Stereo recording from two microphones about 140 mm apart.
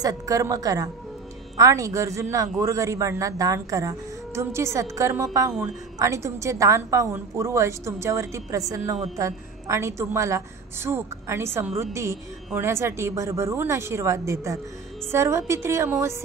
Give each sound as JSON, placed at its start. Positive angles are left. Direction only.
{"t": 0.0, "sound": "a woman's voice", "side_deg": -25}